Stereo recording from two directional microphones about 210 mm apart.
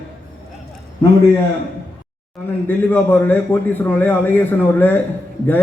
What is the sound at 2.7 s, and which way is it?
A man's voice, 10° left (ahead or behind).